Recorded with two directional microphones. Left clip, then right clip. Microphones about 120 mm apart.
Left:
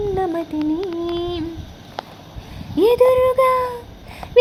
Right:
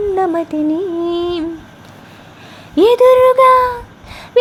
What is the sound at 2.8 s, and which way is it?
Speech, 20° right (ahead or behind).